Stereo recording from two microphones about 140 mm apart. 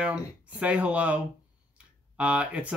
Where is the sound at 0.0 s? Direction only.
10° right (ahead or behind).